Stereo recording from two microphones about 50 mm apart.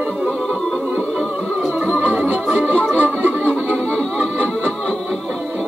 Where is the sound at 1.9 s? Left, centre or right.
Right.